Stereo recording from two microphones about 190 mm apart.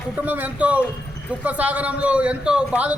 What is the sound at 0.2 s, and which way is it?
A man's voice, 10° right (ahead or behind).